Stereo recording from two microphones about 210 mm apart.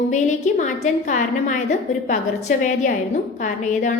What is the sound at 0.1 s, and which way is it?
A woman's voice, 35° left (ahead or behind).